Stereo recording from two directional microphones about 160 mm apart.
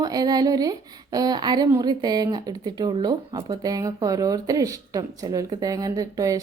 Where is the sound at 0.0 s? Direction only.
25° right (ahead or behind).